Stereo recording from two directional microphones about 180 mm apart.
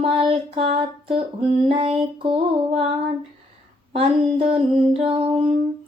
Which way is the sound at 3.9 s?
30° right (ahead or behind).